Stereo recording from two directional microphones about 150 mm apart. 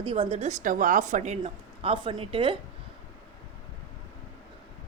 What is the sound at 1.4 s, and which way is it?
A woman's voice, 35° right (ahead or behind).